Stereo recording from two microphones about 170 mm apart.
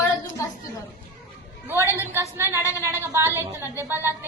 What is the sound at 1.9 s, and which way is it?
A woman's voice, 15° right (ahead or behind).